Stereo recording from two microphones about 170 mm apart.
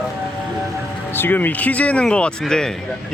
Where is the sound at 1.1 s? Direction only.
10° left (ahead or behind).